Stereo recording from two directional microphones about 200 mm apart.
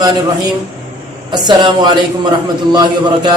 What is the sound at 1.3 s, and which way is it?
A man's voice, 20° right (ahead or behind).